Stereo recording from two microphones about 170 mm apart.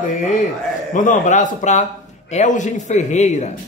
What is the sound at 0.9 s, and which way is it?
Speech, 45° left (ahead or behind).